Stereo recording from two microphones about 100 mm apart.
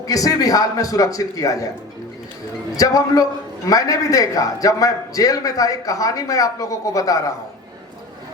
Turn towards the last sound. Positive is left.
turn(degrees=35)  # may be behind; listen again after turning